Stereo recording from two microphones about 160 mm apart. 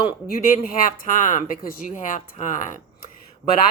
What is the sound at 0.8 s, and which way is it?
Speech, 55° left (ahead or behind).